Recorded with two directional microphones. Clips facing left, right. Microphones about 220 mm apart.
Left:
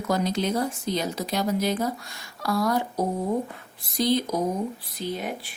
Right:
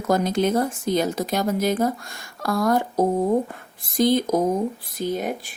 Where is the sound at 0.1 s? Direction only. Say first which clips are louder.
Right 5 dB; 50° right (ahead or behind).